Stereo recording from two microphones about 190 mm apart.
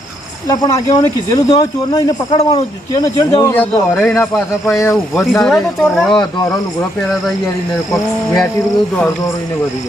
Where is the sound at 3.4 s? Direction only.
10° left (ahead or behind).